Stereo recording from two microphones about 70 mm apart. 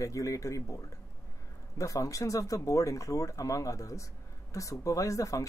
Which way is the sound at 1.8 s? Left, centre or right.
Left.